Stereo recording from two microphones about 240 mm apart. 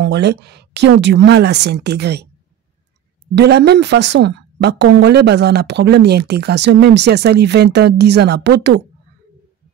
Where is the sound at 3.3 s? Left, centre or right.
Right.